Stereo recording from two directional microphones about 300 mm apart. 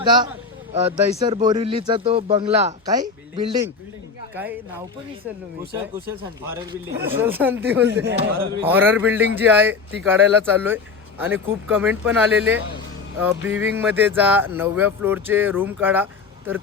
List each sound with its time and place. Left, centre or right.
0.0 s a man's voice: centre
5.7 s speech: centre